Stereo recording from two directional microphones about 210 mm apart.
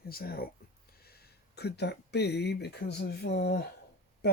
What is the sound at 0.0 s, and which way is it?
Speech, 45° left (ahead or behind).